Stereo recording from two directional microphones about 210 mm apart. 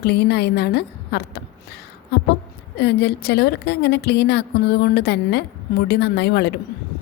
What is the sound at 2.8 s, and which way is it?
A woman's voice, 50° left (ahead or behind).